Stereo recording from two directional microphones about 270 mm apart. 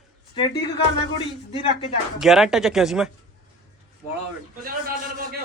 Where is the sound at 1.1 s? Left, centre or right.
Centre.